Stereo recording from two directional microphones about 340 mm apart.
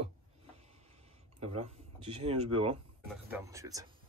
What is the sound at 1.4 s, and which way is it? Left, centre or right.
Speech, right.